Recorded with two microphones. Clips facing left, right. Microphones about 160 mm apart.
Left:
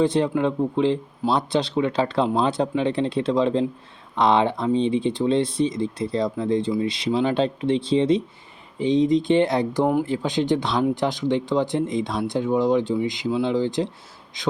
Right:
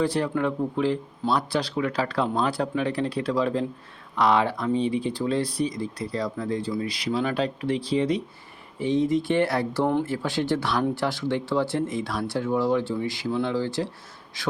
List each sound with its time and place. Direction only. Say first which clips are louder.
0.0 s speech: left 4 dB; 20° left (ahead or behind)